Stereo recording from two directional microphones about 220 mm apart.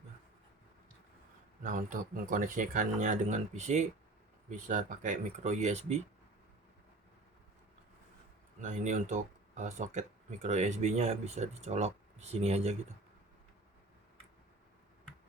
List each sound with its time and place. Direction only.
1.6 s speech: 35° right (ahead or behind)
8.6 s speech: 35° right (ahead or behind)